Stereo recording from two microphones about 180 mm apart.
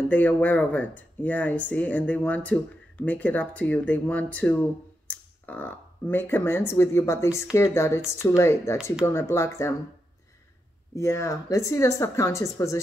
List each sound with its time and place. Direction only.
0.1 s speech: 10° left (ahead or behind)
11.0 s speech: 15° left (ahead or behind)